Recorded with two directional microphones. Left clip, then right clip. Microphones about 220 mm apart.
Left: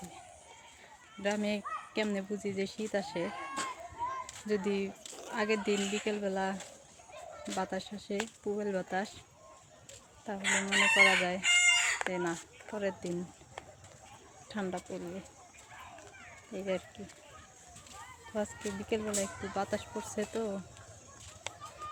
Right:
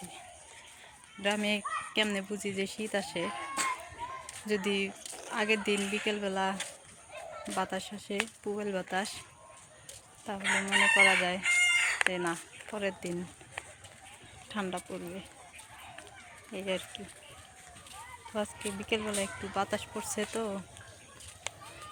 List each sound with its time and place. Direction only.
1.2 s speech: centre (ahead or behind)
10.4 s chicken: 40° left (ahead or behind)
11.0 s speech: centre (ahead or behind)
11.4 s chicken: 40° left (ahead or behind)
12.1 s speech: centre (ahead or behind)
14.5 s speech: centre (ahead or behind)
16.5 s speech: centre (ahead or behind)
18.3 s speech: centre (ahead or behind)
21.5 s fowl: 5° left (ahead or behind)